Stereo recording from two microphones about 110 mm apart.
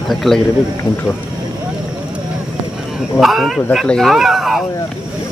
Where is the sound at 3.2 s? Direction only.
Centre (ahead or behind).